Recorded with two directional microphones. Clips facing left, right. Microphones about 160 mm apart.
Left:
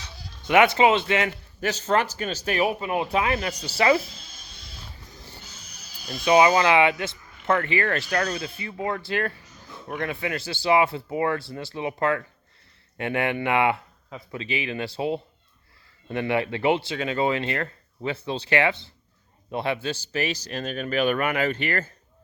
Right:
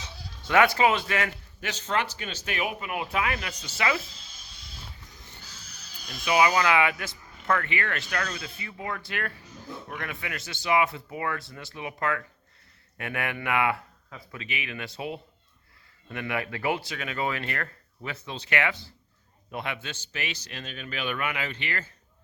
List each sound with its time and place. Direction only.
0.4 s speech: 20° left (ahead or behind)
1.6 s speech: 40° left (ahead or behind)
5.4 s a sound: 20° left (ahead or behind); by 6.2 s 5° left (ahead or behind)
6.2 s a man's voice: 30° left (ahead or behind); by 21.9 s 45° left (ahead or behind)